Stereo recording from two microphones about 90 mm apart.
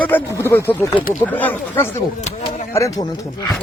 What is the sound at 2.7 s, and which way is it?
Speech, 35° left (ahead or behind).